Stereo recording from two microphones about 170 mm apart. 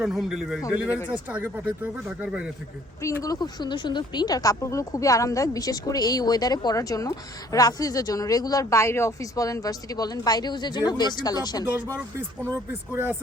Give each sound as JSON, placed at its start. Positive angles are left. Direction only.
{"t": 0.0, "sound": "speech", "side_deg": 0}
{"t": 0.9, "sound": "speech", "side_deg": 15}
{"t": 1.1, "sound": "speech", "side_deg": -10}
{"t": 3.0, "sound": "speech", "side_deg": 20}